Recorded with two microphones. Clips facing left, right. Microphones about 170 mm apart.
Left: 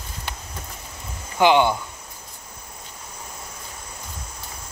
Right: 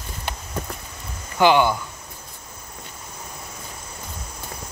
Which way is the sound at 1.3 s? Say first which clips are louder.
Even; 20° left (ahead or behind).